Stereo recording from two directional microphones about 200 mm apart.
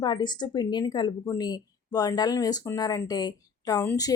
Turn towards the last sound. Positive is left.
turn(degrees=15)  # may be behind; listen again after turning